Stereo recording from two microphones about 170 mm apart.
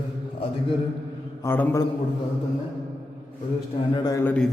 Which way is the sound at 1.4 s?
15° left (ahead or behind).